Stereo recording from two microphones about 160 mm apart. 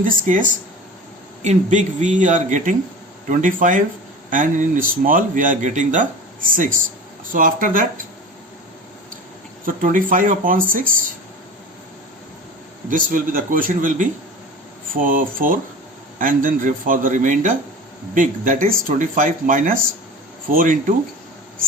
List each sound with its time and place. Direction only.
0.0 s speech: 55° right (ahead or behind)
1.5 s speech: 50° right (ahead or behind)
7.3 s speech: 60° right (ahead or behind)
9.6 s speech: 55° right (ahead or behind)
12.9 s speech: 55° right (ahead or behind)